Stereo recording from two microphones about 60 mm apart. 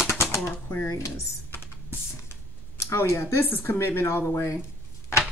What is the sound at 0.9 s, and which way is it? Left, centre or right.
Speech, left.